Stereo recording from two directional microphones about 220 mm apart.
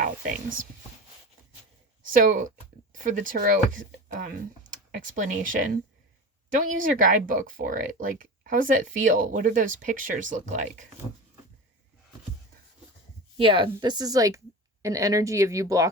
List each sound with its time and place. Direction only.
2.1 s speech: 35° right (ahead or behind)
13.3 s a woman's voice: 25° right (ahead or behind)